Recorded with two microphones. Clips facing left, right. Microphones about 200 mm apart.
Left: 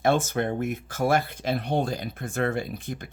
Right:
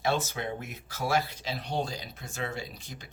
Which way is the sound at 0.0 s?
50° left (ahead or behind).